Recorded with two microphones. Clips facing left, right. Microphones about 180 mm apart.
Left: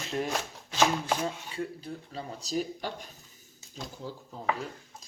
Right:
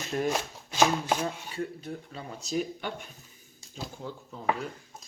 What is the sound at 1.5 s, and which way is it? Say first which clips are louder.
Speech: right 1 dB; 30° left (ahead or behind).